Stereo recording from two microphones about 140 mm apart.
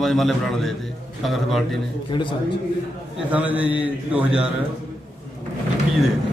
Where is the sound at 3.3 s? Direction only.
10° right (ahead or behind).